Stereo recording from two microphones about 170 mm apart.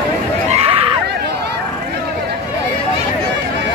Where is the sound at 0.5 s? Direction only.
35° right (ahead or behind).